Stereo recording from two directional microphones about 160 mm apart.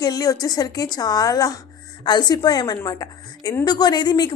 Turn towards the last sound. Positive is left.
turn(degrees=25)  # may be behind; listen again after turning